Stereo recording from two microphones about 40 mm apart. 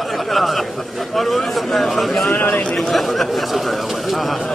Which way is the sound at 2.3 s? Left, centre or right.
Left.